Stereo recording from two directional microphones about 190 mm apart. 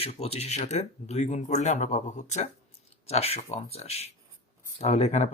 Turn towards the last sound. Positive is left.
turn(degrees=35)  # may be behind; listen again after turning